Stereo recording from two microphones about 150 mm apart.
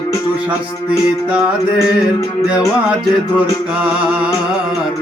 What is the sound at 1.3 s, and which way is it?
Music, 5° right (ahead or behind).